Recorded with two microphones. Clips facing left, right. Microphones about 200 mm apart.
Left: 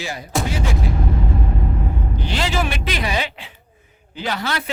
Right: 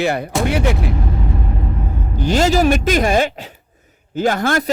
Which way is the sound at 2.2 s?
45° right (ahead or behind).